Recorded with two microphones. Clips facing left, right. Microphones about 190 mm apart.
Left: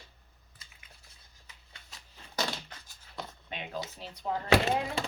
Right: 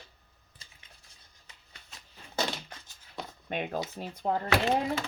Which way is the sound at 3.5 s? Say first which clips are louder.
Right 6 dB; 50° right (ahead or behind).